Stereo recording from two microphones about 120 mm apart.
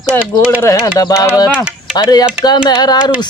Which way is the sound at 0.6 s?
25° left (ahead or behind).